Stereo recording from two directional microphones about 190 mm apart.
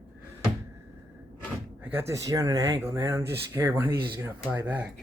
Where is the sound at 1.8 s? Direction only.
10° right (ahead or behind).